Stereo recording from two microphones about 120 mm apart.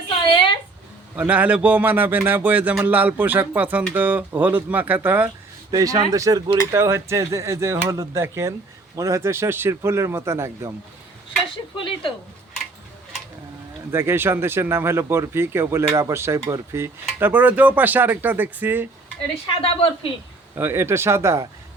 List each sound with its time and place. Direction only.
1.1 s speech: 15° right (ahead or behind)
5.7 s speech: 30° right (ahead or behind)
11.8 s speech: 45° left (ahead or behind)
13.9 s speech: 20° right (ahead or behind)
19.6 s a woman's voice: 50° left (ahead or behind)
20.6 s speech: 20° right (ahead or behind)